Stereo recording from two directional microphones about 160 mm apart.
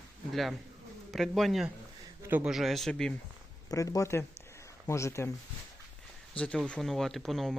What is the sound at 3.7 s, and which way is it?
Speech, 20° left (ahead or behind).